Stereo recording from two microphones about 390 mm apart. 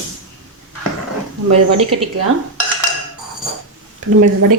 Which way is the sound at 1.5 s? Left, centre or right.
Right.